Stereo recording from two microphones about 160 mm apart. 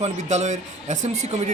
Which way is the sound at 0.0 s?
45° right (ahead or behind).